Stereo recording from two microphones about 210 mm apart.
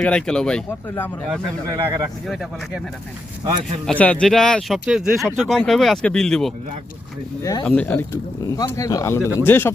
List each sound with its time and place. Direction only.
0.0 s speech: 5° left (ahead or behind)
1.6 s speech: 15° right (ahead or behind)
2.2 s speech: centre (ahead or behind)
3.8 s speech: 5° left (ahead or behind)